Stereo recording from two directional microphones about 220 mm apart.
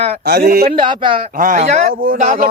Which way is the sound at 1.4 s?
35° right (ahead or behind).